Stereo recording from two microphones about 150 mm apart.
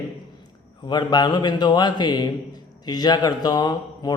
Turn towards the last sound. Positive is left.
turn(degrees=25)  # may be behind; listen again after turning